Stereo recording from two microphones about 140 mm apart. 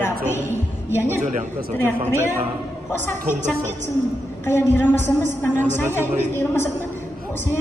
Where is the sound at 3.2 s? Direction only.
60° right (ahead or behind).